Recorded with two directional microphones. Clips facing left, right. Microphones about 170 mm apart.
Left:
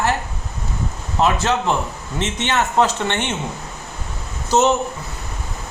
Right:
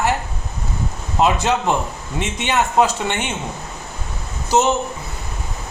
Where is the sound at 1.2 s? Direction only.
15° right (ahead or behind).